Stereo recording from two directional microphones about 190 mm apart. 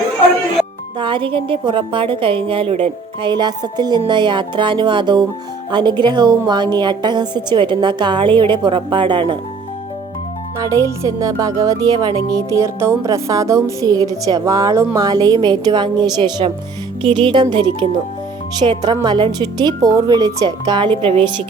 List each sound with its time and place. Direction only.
0.9 s a woman's voice: 25° right (ahead or behind)
10.6 s music: 15° right (ahead or behind)
14.9 s a woman's voice: 20° right (ahead or behind)